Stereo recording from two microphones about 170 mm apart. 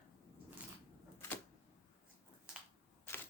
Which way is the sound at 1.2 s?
15° left (ahead or behind).